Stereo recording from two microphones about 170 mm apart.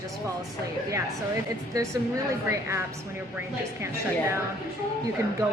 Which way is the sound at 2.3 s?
15° right (ahead or behind).